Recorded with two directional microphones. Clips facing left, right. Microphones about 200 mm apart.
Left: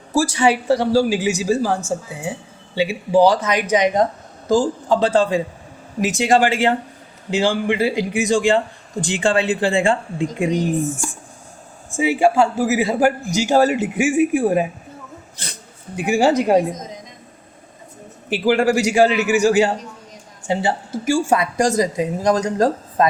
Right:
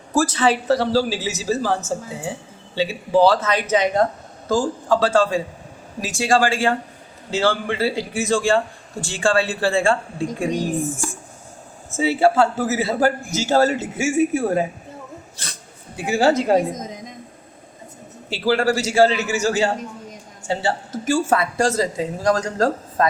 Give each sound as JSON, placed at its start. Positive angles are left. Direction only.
{"t": 0.1, "sound": "a man's voice", "side_deg": 10}
{"t": 16.0, "sound": "a man's voice", "side_deg": 15}
{"t": 18.3, "sound": "a man's voice", "side_deg": 15}